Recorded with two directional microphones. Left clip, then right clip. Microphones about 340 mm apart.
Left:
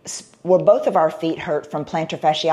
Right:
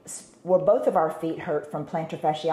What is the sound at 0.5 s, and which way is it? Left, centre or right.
Speech, left.